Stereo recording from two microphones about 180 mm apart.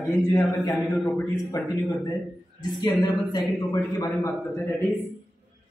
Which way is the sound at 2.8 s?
20° left (ahead or behind).